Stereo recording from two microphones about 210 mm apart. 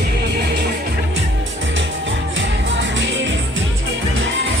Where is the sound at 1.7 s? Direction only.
60° right (ahead or behind).